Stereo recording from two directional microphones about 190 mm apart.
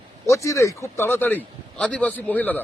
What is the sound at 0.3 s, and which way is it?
Speech, 15° left (ahead or behind).